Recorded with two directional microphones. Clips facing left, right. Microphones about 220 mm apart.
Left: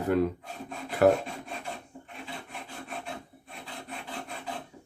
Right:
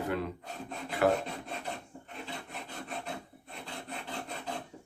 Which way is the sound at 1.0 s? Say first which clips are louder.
Left 6 dB; 40° left (ahead or behind).